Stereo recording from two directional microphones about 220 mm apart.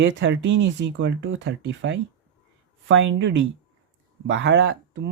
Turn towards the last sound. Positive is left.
turn(degrees=-50)  # may be behind; listen again after turning